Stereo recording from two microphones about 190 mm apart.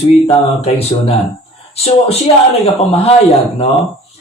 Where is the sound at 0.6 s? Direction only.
30° left (ahead or behind).